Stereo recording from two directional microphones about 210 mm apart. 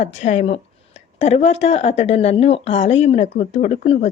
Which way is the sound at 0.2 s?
30° left (ahead or behind).